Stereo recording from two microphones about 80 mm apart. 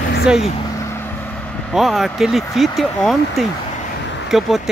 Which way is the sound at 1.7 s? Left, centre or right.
Centre.